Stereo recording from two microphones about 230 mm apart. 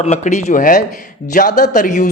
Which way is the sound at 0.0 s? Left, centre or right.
Left.